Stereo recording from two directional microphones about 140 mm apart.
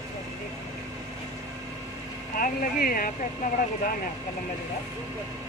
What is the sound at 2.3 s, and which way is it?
Speech, 85° left.